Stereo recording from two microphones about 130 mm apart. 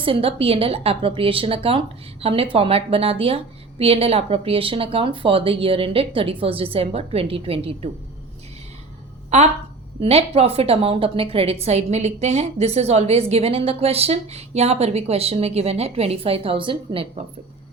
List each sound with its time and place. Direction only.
0.0 s a woman's voice: 45° right (ahead or behind)
9.3 s speech: 65° right (ahead or behind)
10.0 s a woman's voice: 50° right (ahead or behind)